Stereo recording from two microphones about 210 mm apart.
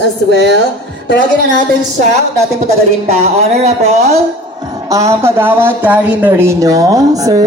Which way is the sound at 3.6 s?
30° right (ahead or behind).